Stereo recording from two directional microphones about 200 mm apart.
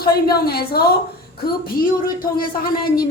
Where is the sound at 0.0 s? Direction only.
50° left (ahead or behind).